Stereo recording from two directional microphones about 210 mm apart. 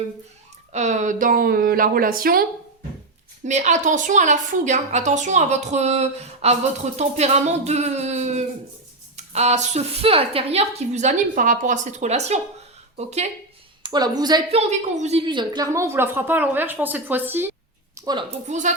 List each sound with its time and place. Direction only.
0.7 s speech: 35° right (ahead or behind)
3.4 s a woman's voice: 35° right (ahead or behind)
13.8 s a woman's voice: 20° right (ahead or behind)
14.5 s a woman's voice: 30° right (ahead or behind)